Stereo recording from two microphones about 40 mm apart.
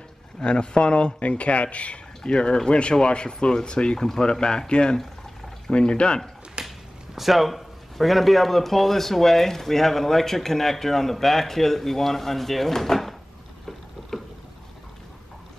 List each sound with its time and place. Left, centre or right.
0.4 s speech: left
4.0 s speech: centre
6.6 s a sound: right
7.2 s speech: centre